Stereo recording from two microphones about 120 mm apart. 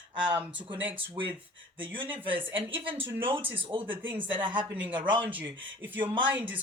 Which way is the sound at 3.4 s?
15° right (ahead or behind).